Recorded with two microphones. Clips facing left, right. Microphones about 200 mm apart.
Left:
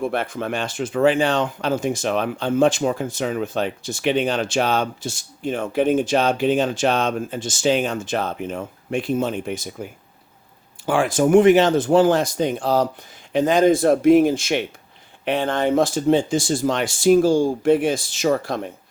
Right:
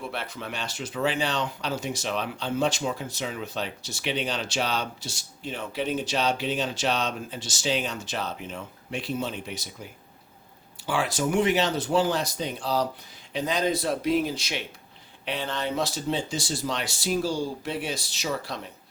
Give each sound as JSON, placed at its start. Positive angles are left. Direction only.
{"t": 0.0, "sound": "speech", "side_deg": 50}